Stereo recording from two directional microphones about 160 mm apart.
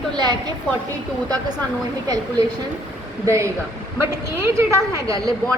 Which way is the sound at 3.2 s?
20° right (ahead or behind).